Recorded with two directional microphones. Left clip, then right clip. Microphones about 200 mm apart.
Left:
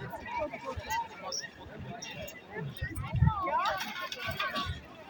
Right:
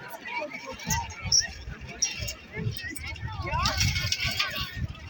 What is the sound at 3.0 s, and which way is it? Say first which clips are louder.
Vehicle: left 3 dB; 45° left (ahead or behind).